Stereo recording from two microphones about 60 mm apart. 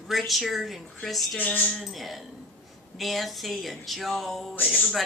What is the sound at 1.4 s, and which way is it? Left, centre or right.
Speech, left.